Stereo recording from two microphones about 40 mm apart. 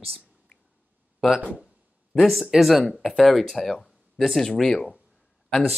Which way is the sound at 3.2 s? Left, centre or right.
Centre.